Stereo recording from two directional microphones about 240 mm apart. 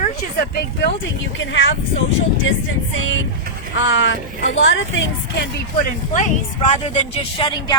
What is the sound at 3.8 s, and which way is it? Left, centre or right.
Speech, left.